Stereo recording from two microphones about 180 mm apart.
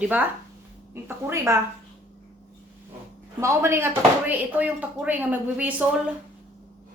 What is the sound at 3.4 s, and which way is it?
Speech, 15° right (ahead or behind).